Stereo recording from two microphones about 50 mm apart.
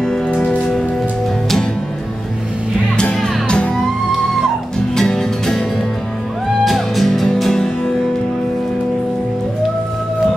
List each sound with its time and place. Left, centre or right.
0.3 s music: left
3.4 s music: left
4.9 s music: centre
6.6 s music: centre